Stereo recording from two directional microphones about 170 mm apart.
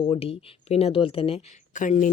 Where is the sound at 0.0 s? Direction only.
35° left (ahead or behind).